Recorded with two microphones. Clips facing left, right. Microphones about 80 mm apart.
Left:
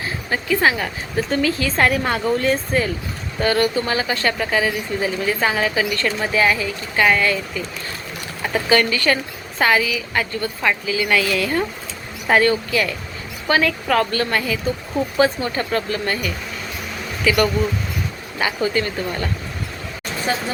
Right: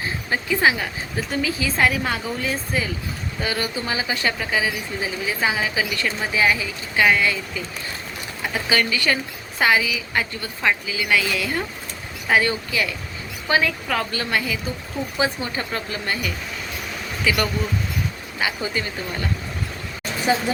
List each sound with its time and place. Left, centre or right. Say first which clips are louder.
0.3 s a woman's voice: left 2 dB; centre
8.7 s a woman's voice: left 4 dB; centre
13.8 s a woman's voice: left 6 dB; centre
20.3 s a woman's voice: right 3 dB; centre